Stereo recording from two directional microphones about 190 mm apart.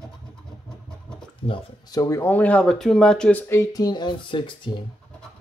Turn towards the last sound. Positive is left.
turn(degrees=25)  # may be behind; listen again after turning